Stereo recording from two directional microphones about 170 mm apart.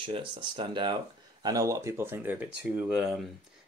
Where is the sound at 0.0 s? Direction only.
30° right (ahead or behind).